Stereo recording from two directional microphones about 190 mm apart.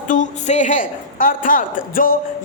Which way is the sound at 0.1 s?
40° left (ahead or behind).